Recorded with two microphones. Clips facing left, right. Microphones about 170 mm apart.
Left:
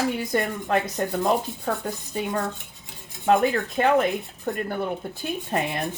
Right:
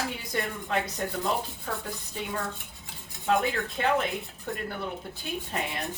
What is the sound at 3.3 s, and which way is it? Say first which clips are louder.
Speech: left 6 dB; 50° left (ahead or behind).